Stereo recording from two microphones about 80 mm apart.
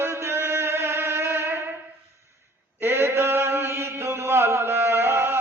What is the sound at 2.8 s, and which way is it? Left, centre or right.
Mantra, right.